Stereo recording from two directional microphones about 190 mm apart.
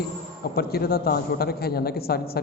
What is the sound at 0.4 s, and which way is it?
Speech, 55° left (ahead or behind).